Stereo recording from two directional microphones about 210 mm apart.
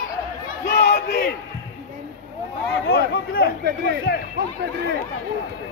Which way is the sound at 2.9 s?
50° left (ahead or behind).